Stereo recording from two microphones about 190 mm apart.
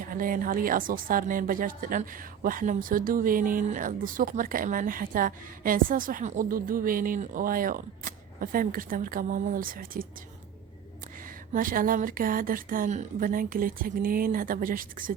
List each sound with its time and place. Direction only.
0.0 s a woman's voice: 45° right (ahead or behind)
11.2 s a woman's voice: 45° right (ahead or behind)